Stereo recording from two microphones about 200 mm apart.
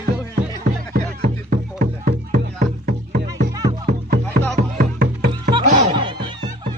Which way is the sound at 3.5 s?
20° right (ahead or behind).